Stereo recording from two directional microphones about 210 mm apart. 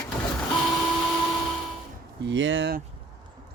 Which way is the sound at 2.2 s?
60° right (ahead or behind).